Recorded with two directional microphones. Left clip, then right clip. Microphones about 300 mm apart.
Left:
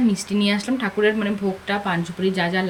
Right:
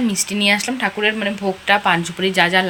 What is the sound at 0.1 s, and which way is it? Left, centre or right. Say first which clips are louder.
Speech: right 6 dB; centre.